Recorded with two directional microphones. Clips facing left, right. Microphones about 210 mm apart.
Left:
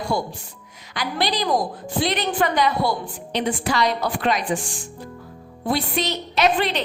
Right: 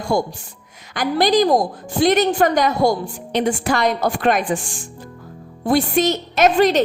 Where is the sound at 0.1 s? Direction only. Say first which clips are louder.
Right 9 dB; 50° right (ahead or behind).